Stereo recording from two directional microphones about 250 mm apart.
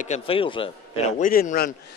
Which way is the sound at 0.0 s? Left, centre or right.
Left.